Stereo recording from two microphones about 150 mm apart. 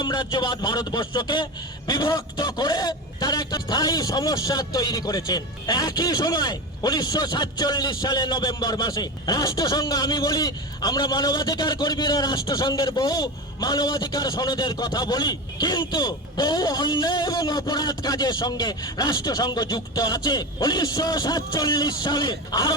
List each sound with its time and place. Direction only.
0.0 s a man's voice: 30° left (ahead or behind)